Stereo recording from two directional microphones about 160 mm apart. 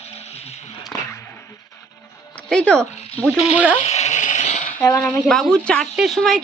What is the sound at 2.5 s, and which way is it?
Speech, 5° left (ahead or behind).